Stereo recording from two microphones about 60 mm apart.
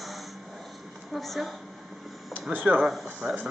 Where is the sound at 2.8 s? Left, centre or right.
Centre.